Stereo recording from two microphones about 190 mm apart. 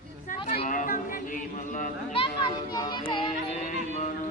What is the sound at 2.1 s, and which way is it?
Children playing, 25° left (ahead or behind).